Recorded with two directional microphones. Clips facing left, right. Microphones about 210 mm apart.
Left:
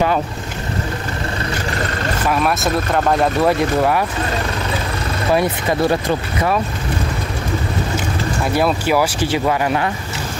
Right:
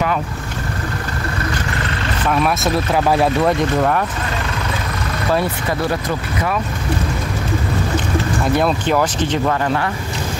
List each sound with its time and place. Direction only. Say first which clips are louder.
2.2 s speech: right 1 dB; centre (ahead or behind)
5.3 s speech: left 2 dB; 15° left (ahead or behind)
5.9 s speech: left 3 dB; 30° left (ahead or behind)
8.5 s speech: left 1 dB; 5° left (ahead or behind)